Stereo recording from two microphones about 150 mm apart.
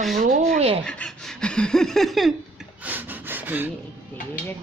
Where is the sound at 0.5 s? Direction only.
40° right (ahead or behind).